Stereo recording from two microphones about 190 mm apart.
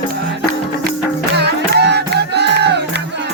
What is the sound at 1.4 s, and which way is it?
Music, 60° right (ahead or behind).